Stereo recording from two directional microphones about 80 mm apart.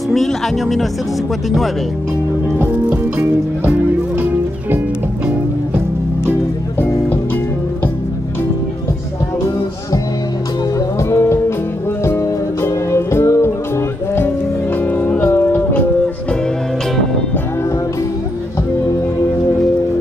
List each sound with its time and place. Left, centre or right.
0.1 s speech: centre
2.6 s music: right
6.8 s music: left
11.0 s music: left